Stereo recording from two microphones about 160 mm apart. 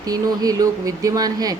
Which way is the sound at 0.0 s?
25° right (ahead or behind).